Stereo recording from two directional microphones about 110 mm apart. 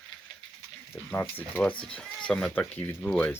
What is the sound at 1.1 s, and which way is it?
Speech, 15° left (ahead or behind).